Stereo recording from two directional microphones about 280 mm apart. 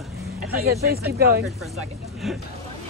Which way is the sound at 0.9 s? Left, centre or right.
Right.